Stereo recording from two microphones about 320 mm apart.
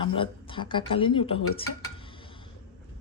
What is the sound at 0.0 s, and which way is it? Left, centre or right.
A woman's voice, centre.